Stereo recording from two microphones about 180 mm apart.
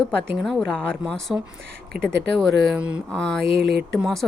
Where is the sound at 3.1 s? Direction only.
5° left (ahead or behind).